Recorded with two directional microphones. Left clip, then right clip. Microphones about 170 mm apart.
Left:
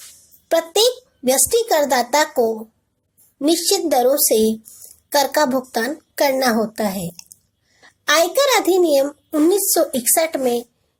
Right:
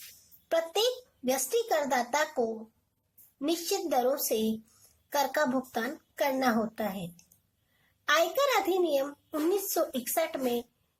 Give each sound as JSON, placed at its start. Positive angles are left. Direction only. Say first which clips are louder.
{"t": 0.4, "sound": "a child's voice", "louder": "left 11 dB", "side_deg": 40}